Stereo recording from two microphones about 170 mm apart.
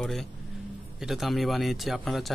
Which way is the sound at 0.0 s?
Centre (ahead or behind).